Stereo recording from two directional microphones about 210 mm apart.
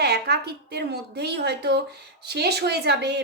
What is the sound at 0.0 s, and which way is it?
A woman's voice, 50° right (ahead or behind).